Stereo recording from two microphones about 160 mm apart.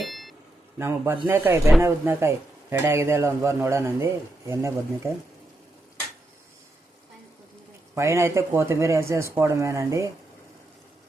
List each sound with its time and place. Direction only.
0.0 s a sound: centre (ahead or behind)
0.8 s speech: 15° right (ahead or behind)
7.9 s speech: 15° right (ahead or behind)